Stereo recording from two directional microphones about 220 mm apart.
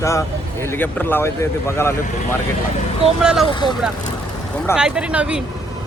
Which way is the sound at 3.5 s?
20° left (ahead or behind).